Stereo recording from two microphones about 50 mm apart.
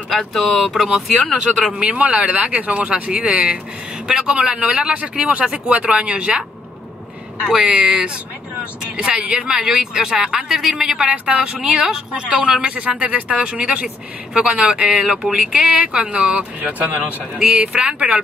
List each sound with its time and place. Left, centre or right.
0.1 s speech: centre
1.6 s a woman's voice: right
7.4 s speech: centre
11.1 s a woman's voice: right
16.6 s speech: right
17.4 s a woman's voice: centre